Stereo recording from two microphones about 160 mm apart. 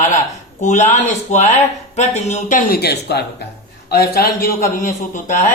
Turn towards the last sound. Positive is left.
turn(degrees=55)  # may be behind; listen again after turning